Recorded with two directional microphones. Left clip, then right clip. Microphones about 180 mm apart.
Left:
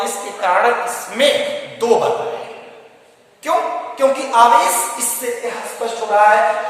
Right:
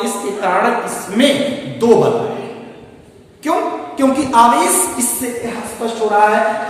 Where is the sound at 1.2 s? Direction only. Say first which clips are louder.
Right 1 dB; 15° left (ahead or behind).